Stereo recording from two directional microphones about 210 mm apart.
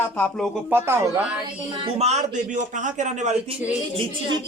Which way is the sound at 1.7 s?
25° right (ahead or behind).